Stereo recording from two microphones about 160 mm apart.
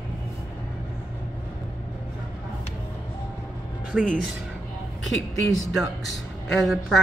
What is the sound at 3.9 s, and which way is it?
Speech, centre (ahead or behind).